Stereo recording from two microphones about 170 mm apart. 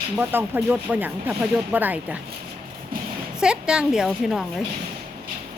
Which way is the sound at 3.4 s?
5° right (ahead or behind).